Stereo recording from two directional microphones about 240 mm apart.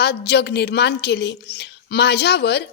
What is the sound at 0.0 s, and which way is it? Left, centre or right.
A woman's voice, left.